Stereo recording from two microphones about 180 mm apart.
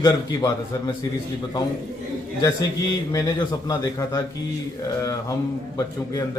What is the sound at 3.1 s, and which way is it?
A man's voice, 20° left (ahead or behind).